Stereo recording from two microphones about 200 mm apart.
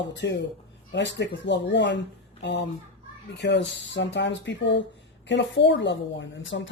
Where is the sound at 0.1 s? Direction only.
60° left (ahead or behind).